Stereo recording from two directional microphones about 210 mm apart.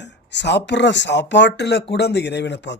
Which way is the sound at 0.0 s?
55° left (ahead or behind).